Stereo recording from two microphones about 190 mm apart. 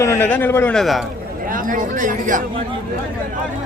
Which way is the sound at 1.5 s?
45° right (ahead or behind).